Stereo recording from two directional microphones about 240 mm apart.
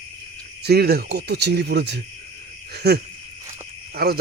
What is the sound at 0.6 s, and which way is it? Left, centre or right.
Speech, right.